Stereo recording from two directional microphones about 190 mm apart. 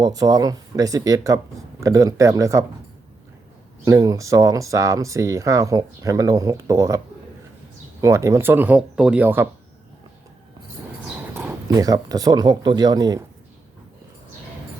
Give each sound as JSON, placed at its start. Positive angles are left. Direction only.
{"t": 0.0, "sound": "speech", "side_deg": -20}
{"t": 3.8, "sound": "speech", "side_deg": -20}
{"t": 8.0, "sound": "speech", "side_deg": -15}
{"t": 11.7, "sound": "speech", "side_deg": -20}